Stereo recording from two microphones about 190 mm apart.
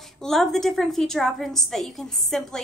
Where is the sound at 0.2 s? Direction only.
Centre (ahead or behind).